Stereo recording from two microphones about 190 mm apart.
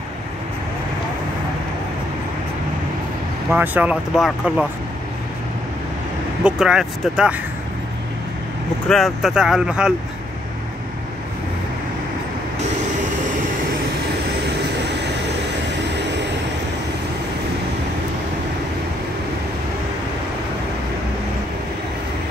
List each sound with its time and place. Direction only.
3.5 s speech: 10° right (ahead or behind)
6.4 s speech: 5° right (ahead or behind)
8.8 s speech: centre (ahead or behind)
16.0 s vehicle: 65° right (ahead or behind)